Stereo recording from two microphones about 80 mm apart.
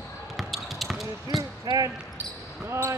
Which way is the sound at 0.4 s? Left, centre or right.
Centre.